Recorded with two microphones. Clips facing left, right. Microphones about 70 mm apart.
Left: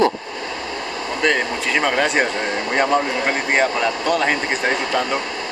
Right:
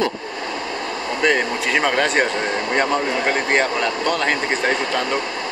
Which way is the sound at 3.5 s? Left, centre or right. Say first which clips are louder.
Left 1 dB; centre.